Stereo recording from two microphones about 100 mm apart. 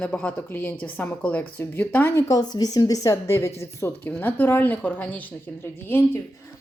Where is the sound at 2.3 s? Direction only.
40° left (ahead or behind); by 6.2 s 25° left (ahead or behind).